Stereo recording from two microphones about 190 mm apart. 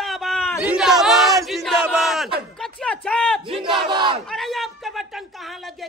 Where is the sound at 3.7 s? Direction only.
25° right (ahead or behind).